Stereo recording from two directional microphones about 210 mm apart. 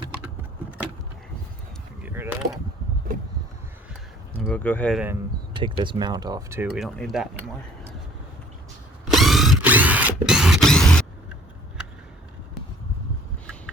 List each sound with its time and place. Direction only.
2.0 s speech: 10° right (ahead or behind)
3.1 s a sound: 40° right (ahead or behind)
4.4 s speech: 10° left (ahead or behind)
5.5 s speech: 25° right (ahead or behind)
6.7 s speech: centre (ahead or behind)
9.0 s ratchet: centre (ahead or behind)